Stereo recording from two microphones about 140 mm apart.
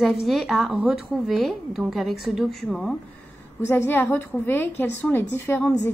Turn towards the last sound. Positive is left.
turn(degrees=15)  # may be behind; listen again after turning